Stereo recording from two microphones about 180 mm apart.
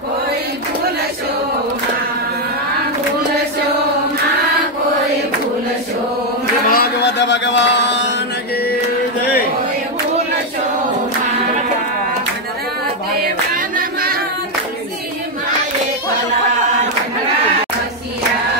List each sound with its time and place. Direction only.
6.7 s music: 65° left (ahead or behind); by 8.1 s 85° left